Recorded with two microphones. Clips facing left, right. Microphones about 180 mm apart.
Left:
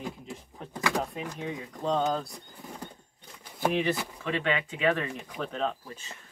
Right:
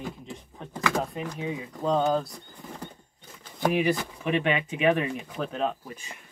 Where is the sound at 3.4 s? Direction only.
10° left (ahead or behind).